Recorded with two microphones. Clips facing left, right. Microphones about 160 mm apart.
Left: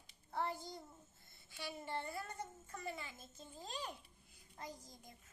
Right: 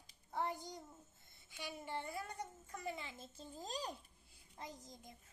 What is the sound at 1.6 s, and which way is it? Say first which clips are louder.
A child's voice: left 1 dB; 15° right (ahead or behind).